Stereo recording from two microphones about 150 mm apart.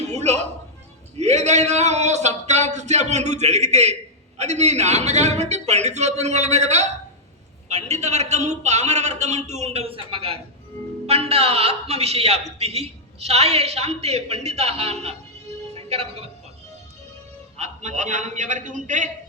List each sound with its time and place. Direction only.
0.0 s a sound: 45° right (ahead or behind)
1.1 s a man's voice: 50° right (ahead or behind)
15.7 s music: 45° right (ahead or behind)
17.6 s a man's voice: 55° right (ahead or behind)